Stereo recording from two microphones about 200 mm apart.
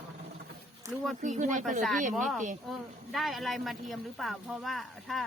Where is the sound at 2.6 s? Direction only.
Centre (ahead or behind).